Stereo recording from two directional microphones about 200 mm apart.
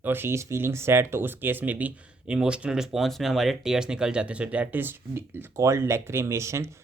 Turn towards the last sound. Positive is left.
turn(degrees=-15)  # may be behind; listen again after turning